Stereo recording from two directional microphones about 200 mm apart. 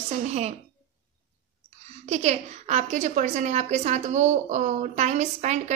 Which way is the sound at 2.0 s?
35° right (ahead or behind).